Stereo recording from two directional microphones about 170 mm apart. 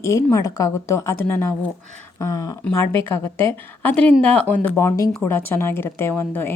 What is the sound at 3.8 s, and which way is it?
A woman's voice, 10° left (ahead or behind).